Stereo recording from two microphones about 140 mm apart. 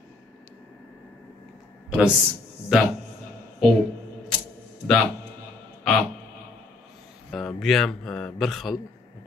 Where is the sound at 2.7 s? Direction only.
5° right (ahead or behind).